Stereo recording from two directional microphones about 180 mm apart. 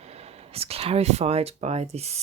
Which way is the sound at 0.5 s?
35° right (ahead or behind).